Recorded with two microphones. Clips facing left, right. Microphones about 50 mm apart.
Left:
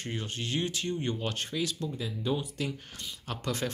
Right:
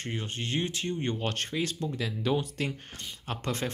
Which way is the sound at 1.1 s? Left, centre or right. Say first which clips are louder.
Right 2 dB; right.